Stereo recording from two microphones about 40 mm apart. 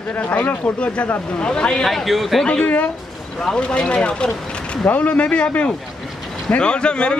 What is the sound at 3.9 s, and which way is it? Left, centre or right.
Speech, left.